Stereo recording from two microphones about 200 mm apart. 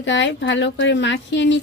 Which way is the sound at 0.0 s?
65° left (ahead or behind).